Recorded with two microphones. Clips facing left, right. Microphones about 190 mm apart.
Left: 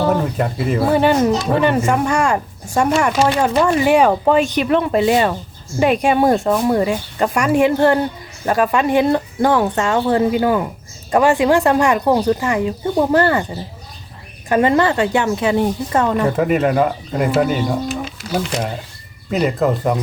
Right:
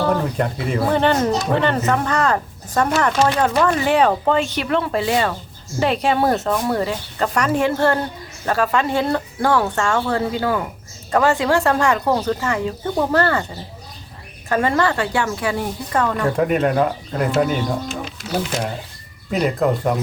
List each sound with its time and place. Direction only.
0.0 s speech: 10° left (ahead or behind)
14.5 s speech: 20° left (ahead or behind)
16.3 s speech: centre (ahead or behind)